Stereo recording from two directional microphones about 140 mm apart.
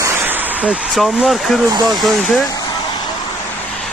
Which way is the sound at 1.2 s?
Centre (ahead or behind).